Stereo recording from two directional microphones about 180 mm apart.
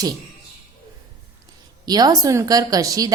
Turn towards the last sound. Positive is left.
turn(degrees=-20)  # may be behind; listen again after turning